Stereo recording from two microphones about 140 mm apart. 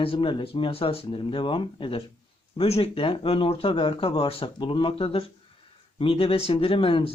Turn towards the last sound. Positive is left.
turn(degrees=40)  # may be behind; listen again after turning